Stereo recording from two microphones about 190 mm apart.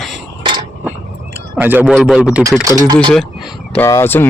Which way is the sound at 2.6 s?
20° right (ahead or behind).